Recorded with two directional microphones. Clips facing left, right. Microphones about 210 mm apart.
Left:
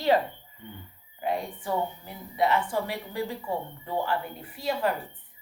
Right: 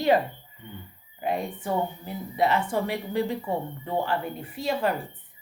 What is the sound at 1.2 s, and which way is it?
A woman's voice, 20° right (ahead or behind).